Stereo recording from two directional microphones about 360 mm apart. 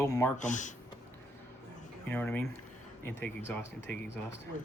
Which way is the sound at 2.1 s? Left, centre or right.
Centre.